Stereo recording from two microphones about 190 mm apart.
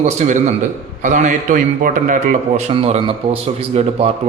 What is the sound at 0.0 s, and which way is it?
A man's voice, 40° right (ahead or behind).